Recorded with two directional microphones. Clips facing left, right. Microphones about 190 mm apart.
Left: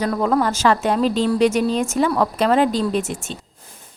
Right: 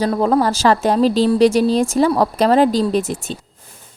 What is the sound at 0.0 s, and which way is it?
Speech, 30° right (ahead or behind).